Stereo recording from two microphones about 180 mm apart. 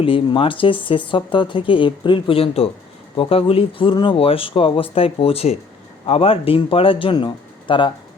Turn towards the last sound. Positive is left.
turn(degrees=25)  # may be behind; listen again after turning